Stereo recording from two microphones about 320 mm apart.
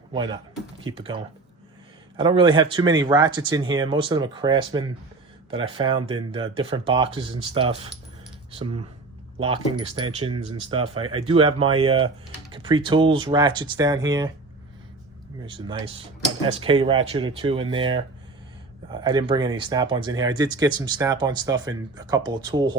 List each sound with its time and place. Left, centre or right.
0.1 s speech: centre
9.4 s speech: centre
15.4 s speech: centre